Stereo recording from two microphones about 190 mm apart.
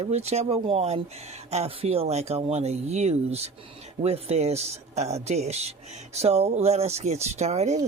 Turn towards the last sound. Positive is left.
turn(degrees=-35)  # may be behind; listen again after turning